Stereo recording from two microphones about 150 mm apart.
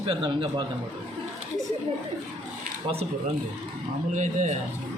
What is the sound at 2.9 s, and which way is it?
Speech, 40° right (ahead or behind).